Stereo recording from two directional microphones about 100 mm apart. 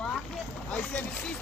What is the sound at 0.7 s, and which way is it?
Speech, 15° left (ahead or behind).